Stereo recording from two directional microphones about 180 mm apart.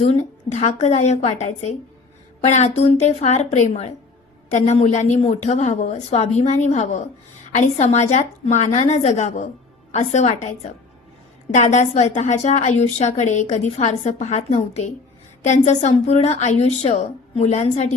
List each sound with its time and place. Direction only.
0.0 s a woman's voice: 40° left (ahead or behind)